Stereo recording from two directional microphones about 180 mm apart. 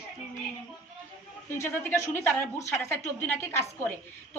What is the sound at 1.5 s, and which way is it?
A woman's voice, 15° left (ahead or behind).